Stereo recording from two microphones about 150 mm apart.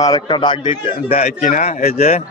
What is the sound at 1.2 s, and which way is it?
A man's voice, 60° left (ahead or behind).